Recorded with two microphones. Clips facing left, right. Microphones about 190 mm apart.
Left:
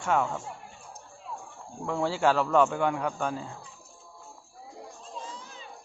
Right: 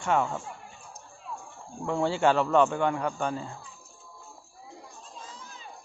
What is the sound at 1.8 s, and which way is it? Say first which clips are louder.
Speech: right 1 dB; centre (ahead or behind).